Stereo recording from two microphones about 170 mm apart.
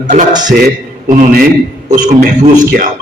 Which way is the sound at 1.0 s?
50° right (ahead or behind).